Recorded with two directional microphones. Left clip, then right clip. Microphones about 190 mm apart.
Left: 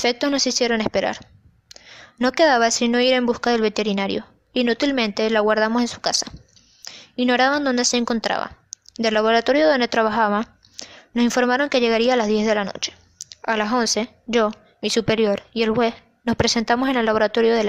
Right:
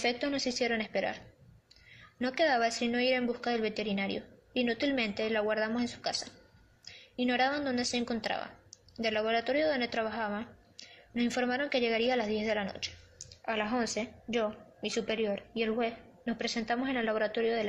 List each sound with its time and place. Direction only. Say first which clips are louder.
0.0 s a woman's voice: left 11 dB; 50° left (ahead or behind)